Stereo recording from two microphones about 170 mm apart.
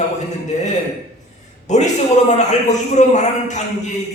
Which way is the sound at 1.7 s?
45° left (ahead or behind).